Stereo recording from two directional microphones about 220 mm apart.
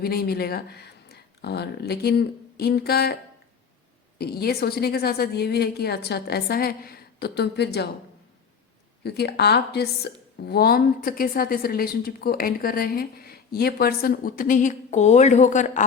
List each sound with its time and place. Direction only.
0.0 s a woman's voice: 45° left (ahead or behind)
4.2 s a woman's voice: 45° left (ahead or behind)
9.0 s a woman's voice: 50° left (ahead or behind)